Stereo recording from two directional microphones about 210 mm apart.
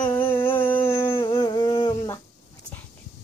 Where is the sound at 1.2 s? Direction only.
20° left (ahead or behind).